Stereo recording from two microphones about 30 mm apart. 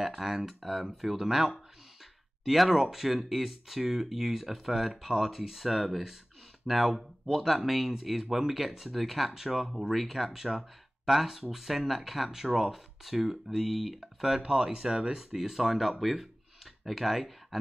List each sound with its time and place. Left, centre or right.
0.0 s speech: centre
14.4 s speech: right; by 17.6 s centre